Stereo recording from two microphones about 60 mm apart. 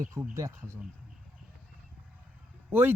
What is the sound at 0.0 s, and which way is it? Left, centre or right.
Speech, right.